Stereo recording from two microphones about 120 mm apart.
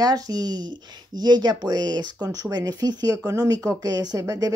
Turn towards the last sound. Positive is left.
turn(degrees=-30)  # may be behind; listen again after turning